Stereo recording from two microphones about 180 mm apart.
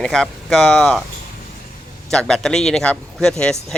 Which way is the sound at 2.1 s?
5° left (ahead or behind).